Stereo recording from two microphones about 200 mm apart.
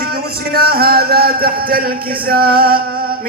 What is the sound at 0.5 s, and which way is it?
A man's voice, 50° right (ahead or behind).